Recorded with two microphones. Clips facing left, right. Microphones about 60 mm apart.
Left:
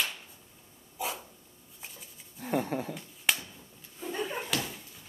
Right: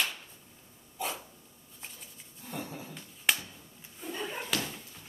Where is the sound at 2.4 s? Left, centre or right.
Left.